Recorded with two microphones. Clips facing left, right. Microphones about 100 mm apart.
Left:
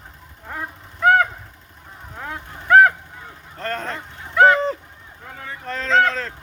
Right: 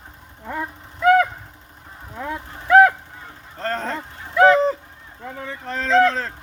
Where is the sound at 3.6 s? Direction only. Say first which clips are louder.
Right 2 dB; 30° right (ahead or behind).